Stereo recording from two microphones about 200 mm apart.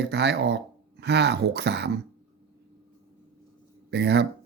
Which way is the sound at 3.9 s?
60° right (ahead or behind).